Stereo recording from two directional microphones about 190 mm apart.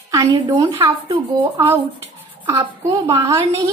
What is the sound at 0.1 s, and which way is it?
A woman's voice, 20° right (ahead or behind).